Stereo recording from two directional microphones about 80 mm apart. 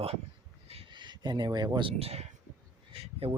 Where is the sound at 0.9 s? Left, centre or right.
Right.